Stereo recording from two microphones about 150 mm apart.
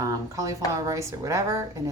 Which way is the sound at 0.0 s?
20° right (ahead or behind).